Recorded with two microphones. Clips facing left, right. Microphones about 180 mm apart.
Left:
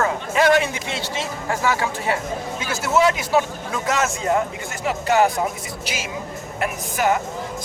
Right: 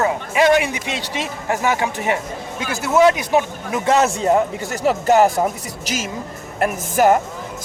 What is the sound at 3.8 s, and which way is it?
A man's voice, 35° right (ahead or behind).